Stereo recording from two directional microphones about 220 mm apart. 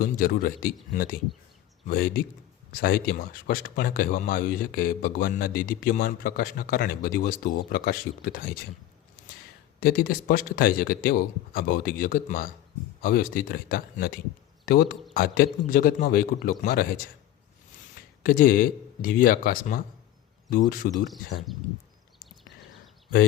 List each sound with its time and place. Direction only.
0.0 s a man's voice: 40° left (ahead or behind)
9.8 s speech: 40° left (ahead or behind)
18.2 s speech: 40° left (ahead or behind)